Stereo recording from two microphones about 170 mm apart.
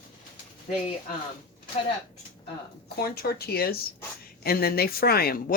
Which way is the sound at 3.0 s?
65° left (ahead or behind).